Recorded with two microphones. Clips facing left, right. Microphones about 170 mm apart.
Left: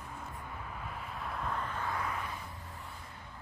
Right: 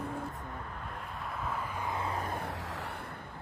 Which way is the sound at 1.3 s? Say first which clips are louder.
Even; 5° right (ahead or behind).